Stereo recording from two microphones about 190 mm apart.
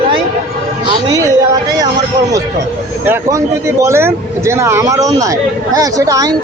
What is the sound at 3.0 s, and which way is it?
Speech, 15° right (ahead or behind).